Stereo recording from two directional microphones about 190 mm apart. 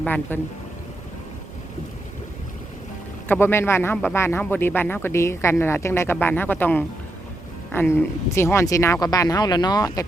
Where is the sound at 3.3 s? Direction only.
10° left (ahead or behind).